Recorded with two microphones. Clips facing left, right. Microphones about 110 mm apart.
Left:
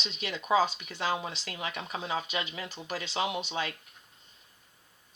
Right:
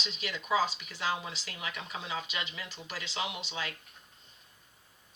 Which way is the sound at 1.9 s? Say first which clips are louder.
Left 5 dB; 45° left (ahead or behind).